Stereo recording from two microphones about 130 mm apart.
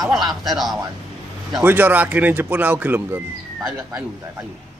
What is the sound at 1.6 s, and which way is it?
Speech, 15° right (ahead or behind).